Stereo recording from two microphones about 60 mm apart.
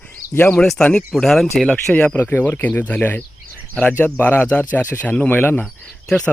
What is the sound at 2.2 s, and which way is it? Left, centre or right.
Speech, left.